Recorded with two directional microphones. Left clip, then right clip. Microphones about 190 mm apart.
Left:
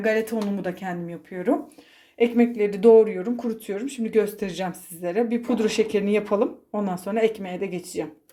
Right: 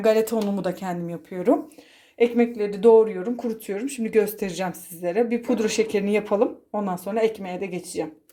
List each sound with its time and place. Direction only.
0.0 s speech: 20° right (ahead or behind)
2.1 s speech: centre (ahead or behind)